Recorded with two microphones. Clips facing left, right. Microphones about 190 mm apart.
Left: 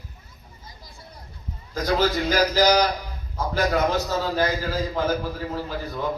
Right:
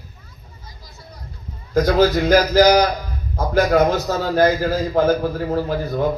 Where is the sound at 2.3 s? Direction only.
50° right (ahead or behind).